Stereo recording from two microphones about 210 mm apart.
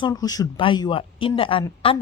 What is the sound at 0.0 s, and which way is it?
Speech, 20° left (ahead or behind).